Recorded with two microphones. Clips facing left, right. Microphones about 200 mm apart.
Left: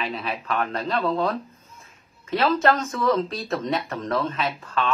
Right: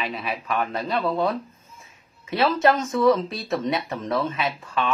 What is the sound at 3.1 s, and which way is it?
Speech, centre (ahead or behind).